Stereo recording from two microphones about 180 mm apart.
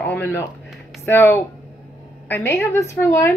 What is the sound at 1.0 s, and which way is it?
A woman's voice, 10° left (ahead or behind).